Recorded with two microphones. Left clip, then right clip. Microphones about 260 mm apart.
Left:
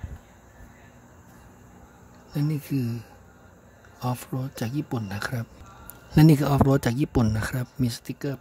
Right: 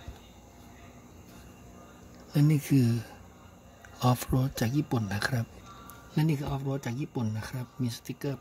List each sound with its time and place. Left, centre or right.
2.3 s speech: centre
6.1 s speech: left